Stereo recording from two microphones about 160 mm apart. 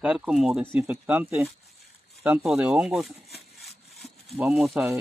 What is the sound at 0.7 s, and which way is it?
Speech, 15° right (ahead or behind).